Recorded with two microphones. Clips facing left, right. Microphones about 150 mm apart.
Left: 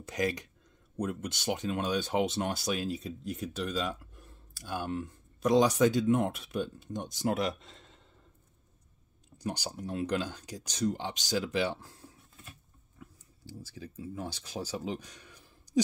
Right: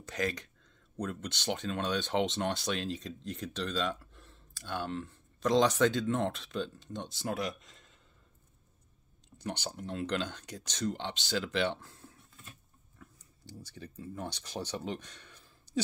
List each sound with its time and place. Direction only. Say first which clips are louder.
0.1 s speech: left 3 dB; 15° left (ahead or behind)
7.3 s speech: left 4 dB; 25° left (ahead or behind)
9.4 s speech: left 2 dB; 10° left (ahead or behind)
13.0 s speech: left 4 dB; 5° left (ahead or behind)